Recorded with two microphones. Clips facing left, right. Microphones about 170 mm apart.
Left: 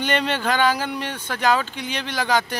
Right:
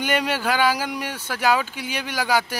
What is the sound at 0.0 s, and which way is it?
Speech, 10° right (ahead or behind).